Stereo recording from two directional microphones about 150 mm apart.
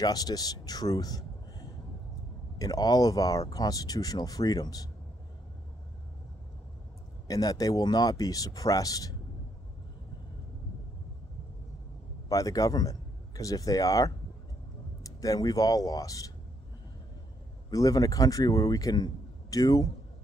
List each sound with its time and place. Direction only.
0.0 s speech: 25° left (ahead or behind)
2.6 s speech: 25° left (ahead or behind)
7.2 s speech: 25° left (ahead or behind)
12.3 s a man's voice: 25° left (ahead or behind)
17.6 s speech: 25° left (ahead or behind)